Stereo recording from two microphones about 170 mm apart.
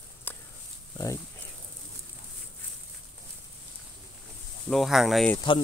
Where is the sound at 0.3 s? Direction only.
10° left (ahead or behind).